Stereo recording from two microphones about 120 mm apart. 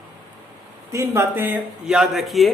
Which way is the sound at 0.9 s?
20° right (ahead or behind).